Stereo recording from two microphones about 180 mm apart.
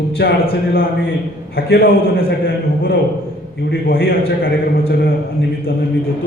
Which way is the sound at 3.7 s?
60° left (ahead or behind).